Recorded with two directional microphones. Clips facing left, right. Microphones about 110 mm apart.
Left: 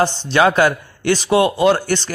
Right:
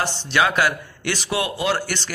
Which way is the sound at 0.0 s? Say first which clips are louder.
Left 6 dB; 30° left (ahead or behind).